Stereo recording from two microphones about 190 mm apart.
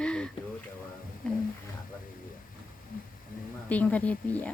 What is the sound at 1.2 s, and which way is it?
Roaring cats, 5° left (ahead or behind).